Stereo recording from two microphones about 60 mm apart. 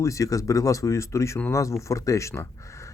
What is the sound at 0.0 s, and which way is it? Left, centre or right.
Speech, left.